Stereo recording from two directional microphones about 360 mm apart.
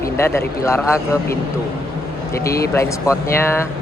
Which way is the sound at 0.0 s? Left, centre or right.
Centre.